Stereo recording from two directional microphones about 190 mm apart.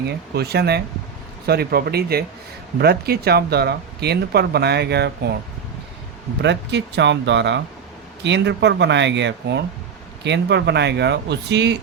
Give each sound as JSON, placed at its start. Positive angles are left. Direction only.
{"t": 0.3, "sound": "speech", "side_deg": -55}
{"t": 6.4, "sound": "speech", "side_deg": -65}